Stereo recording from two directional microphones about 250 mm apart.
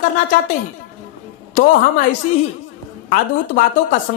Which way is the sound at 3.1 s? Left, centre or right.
Left.